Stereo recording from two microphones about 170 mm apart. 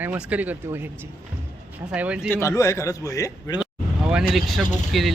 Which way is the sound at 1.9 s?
5° right (ahead or behind).